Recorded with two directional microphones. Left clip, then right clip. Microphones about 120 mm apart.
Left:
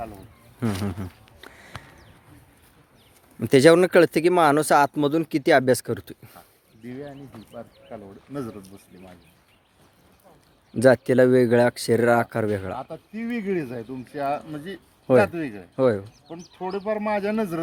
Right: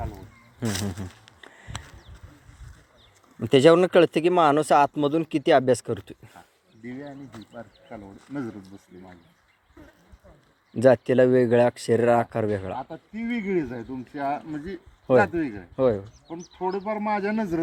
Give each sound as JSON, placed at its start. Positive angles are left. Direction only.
{"t": 0.6, "sound": "speech", "side_deg": 55}
{"t": 1.5, "sound": "a sound", "side_deg": 40}
{"t": 3.4, "sound": "speech", "side_deg": 35}
{"t": 7.9, "sound": "speech", "side_deg": 25}
{"t": 10.8, "sound": "speech", "side_deg": 35}
{"t": 15.7, "sound": "speech", "side_deg": 45}
{"t": 16.3, "sound": "speech", "side_deg": 10}